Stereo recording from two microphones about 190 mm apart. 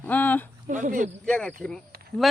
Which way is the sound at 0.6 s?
40° right (ahead or behind).